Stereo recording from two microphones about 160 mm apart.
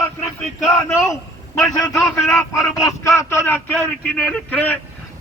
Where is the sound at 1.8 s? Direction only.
15° left (ahead or behind).